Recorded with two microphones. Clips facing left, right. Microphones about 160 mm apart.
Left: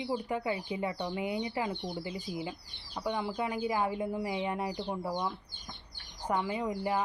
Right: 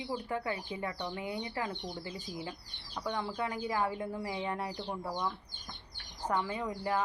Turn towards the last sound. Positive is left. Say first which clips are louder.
# left 2 dB
turn(degrees=15)  # may be behind; listen again after turning